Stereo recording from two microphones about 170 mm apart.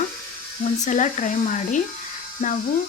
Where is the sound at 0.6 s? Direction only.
45° left (ahead or behind).